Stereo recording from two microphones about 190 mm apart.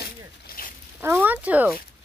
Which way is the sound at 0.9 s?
10° right (ahead or behind).